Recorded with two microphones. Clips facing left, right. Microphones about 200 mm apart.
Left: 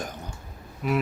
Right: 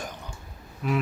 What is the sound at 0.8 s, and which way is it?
Insect, 5° left (ahead or behind).